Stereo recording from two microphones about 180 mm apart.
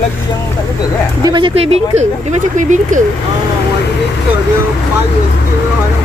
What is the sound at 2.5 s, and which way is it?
Speech, 45° right (ahead or behind).